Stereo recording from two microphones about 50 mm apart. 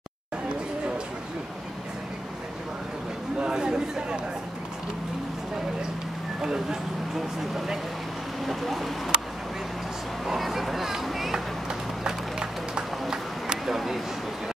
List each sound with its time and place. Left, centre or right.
3.3 s a sound: centre
6.4 s speech: centre
10.2 s speech: centre
12.0 s music: centre
13.1 s run: centre
13.7 s speech: centre